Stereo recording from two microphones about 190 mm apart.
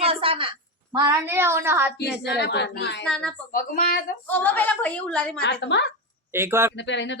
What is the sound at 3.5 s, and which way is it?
Speech, 45° left (ahead or behind).